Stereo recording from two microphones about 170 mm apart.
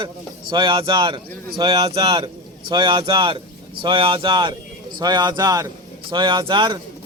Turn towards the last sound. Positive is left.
turn(degrees=-25)  # may be behind; listen again after turning